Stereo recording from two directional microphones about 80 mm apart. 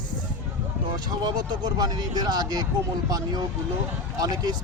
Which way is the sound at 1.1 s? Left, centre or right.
Right.